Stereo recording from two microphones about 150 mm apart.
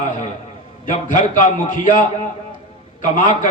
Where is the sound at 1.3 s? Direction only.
65° left (ahead or behind).